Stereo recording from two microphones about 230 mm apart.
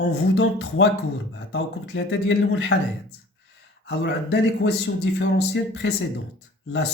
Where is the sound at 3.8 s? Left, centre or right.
Left.